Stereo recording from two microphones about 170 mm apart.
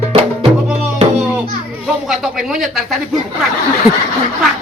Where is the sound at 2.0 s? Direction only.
Centre (ahead or behind).